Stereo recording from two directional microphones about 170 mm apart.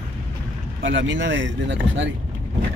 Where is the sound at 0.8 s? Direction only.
90° right.